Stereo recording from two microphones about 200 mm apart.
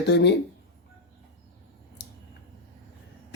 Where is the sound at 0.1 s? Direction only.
60° left (ahead or behind).